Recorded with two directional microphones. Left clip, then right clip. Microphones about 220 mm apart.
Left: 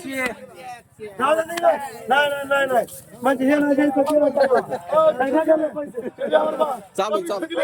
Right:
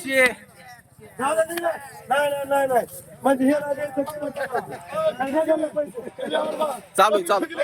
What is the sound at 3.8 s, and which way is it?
Speech, 55° left (ahead or behind).